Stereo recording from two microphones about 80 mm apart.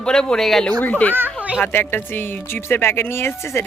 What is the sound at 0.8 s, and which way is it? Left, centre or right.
Speech, left.